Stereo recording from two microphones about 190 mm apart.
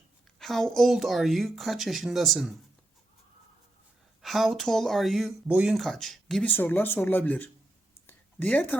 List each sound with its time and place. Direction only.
0.3 s speech: centre (ahead or behind)
4.2 s speech: centre (ahead or behind)
8.0 s a sound: 10° left (ahead or behind)